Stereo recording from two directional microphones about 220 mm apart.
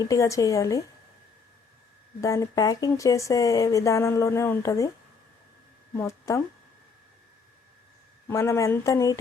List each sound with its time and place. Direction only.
0.0 s speech: 15° left (ahead or behind)
2.2 s speech: 15° left (ahead or behind)
5.9 s speech: 15° left (ahead or behind)
8.3 s speech: 15° left (ahead or behind)